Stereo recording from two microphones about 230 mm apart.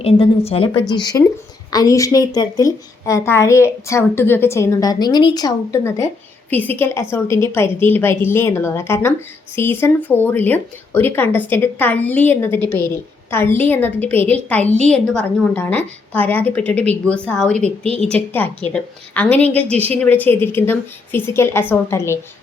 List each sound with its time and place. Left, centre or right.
0.0 s a woman's voice: left